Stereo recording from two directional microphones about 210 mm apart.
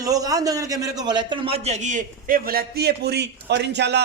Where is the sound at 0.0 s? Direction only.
15° right (ahead or behind).